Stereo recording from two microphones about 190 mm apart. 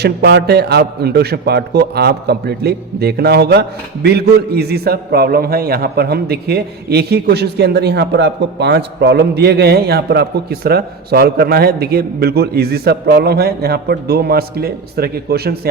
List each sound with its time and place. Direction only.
0.0 s a man's voice: 60° right (ahead or behind)